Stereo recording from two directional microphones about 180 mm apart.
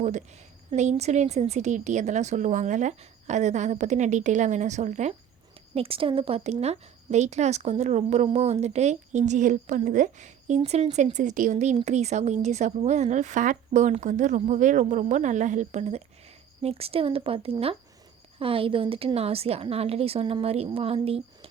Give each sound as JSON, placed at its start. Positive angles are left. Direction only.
{"t": 0.0, "sound": "a woman's voice", "side_deg": -40}